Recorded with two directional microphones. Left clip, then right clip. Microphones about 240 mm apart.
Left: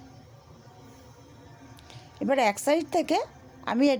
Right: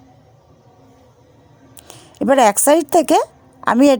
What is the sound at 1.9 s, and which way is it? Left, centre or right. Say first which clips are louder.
A woman's voice: right 11 dB; right.